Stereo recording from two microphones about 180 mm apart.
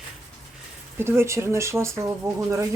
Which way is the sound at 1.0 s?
15° right (ahead or behind).